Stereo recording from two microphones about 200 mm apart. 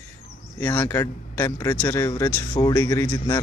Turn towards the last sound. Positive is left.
turn(degrees=20)  # may be behind; listen again after turning